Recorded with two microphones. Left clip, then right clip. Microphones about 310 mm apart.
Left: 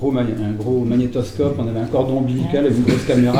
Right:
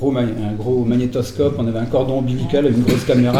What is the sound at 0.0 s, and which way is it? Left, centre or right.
Speech, right.